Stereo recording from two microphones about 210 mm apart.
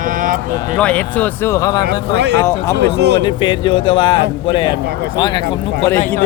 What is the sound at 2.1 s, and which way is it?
Speech, 55° right (ahead or behind).